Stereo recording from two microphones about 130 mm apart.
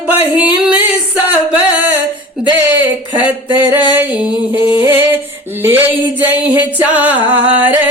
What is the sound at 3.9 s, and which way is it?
Music, 10° right (ahead or behind).